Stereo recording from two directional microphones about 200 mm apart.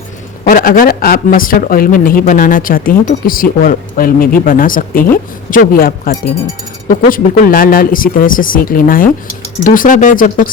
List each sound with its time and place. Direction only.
0.4 s speech: 45° left (ahead or behind)